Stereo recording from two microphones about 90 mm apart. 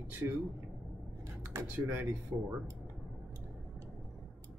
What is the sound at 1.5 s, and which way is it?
Speech, 35° right (ahead or behind).